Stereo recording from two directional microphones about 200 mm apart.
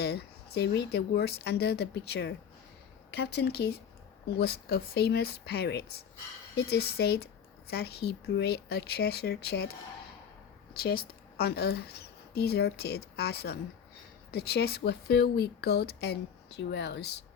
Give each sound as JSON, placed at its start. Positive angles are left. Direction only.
{"t": 0.0, "sound": "speech", "side_deg": 55}
{"t": 10.8, "sound": "a woman's voice", "side_deg": 50}